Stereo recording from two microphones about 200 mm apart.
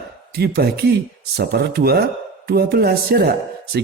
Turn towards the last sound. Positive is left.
turn(degrees=-50)  # may be behind; listen again after turning